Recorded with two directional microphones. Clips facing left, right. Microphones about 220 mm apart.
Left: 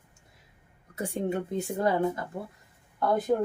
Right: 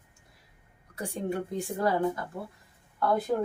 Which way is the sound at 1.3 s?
20° left (ahead or behind).